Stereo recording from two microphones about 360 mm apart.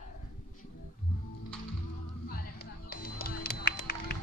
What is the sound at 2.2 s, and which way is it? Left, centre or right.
Music, left.